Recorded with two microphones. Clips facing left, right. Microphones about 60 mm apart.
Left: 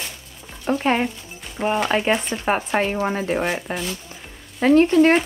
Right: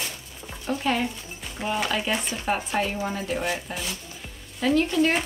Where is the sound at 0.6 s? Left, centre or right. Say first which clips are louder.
Left 5 dB; left.